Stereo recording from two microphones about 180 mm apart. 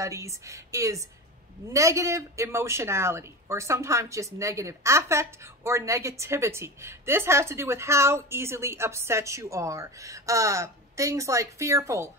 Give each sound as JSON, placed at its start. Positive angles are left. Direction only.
{"t": 0.0, "sound": "a woman's voice", "side_deg": -15}